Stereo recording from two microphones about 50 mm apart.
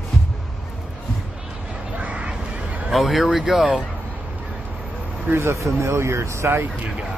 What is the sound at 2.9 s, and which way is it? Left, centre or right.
Speech, centre.